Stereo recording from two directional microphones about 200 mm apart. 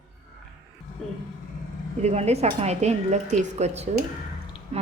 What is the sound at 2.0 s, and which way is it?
Speech, 35° right (ahead or behind).